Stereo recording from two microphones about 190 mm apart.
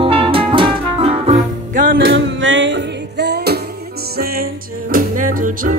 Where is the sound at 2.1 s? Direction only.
70° right (ahead or behind).